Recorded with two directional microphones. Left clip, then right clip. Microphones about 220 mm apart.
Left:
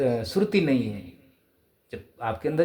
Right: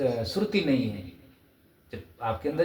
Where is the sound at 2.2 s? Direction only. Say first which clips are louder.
Left 1 dB; 50° left (ahead or behind).